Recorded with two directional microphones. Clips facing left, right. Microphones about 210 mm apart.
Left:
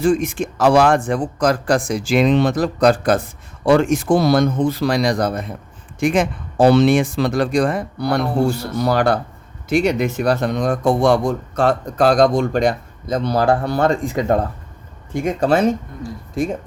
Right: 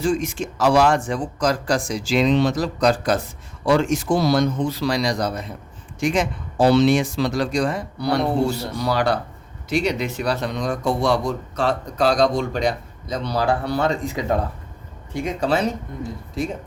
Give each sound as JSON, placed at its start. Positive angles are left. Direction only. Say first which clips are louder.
{"t": 0.0, "sound": "speech", "louder": "left 5 dB", "side_deg": 55}